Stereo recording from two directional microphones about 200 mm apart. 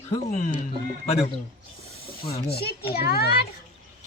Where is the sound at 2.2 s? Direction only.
50° left (ahead or behind).